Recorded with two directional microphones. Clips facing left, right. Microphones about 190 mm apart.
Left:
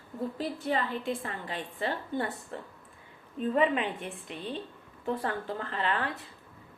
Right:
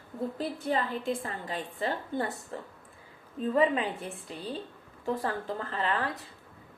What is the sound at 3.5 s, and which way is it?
A woman's voice, 30° right (ahead or behind).